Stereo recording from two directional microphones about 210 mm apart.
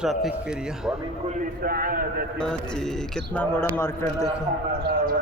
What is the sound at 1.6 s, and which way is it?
Speech, 45° right (ahead or behind).